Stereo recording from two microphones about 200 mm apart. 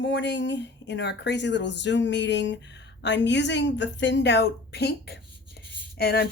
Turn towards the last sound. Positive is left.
turn(degrees=50)  # may be behind; listen again after turning